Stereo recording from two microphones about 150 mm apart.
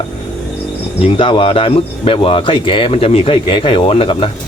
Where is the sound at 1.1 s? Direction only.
35° left (ahead or behind).